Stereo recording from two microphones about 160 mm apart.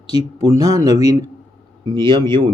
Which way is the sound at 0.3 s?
25° right (ahead or behind).